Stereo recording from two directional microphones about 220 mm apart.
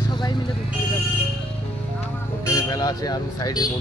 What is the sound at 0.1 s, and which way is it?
Vehicle, 20° left (ahead or behind).